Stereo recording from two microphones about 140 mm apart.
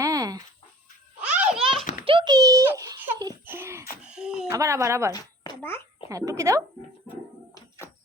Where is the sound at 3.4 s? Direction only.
15° right (ahead or behind).